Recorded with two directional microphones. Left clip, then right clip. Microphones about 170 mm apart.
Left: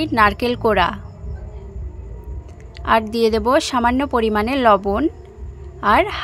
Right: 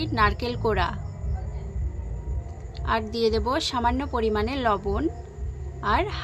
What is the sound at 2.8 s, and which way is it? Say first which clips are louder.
A woman's voice: left 8 dB; 50° left (ahead or behind).